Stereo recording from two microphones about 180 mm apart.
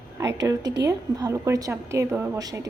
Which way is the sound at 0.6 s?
75° right (ahead or behind).